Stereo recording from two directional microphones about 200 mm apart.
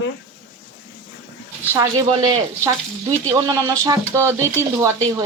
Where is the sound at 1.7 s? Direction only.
15° right (ahead or behind).